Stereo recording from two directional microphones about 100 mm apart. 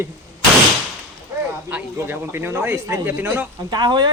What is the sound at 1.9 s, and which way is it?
Speech, 25° right (ahead or behind).